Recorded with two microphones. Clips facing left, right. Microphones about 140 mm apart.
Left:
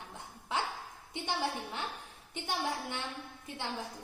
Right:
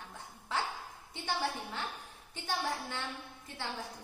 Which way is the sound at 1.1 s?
15° left (ahead or behind).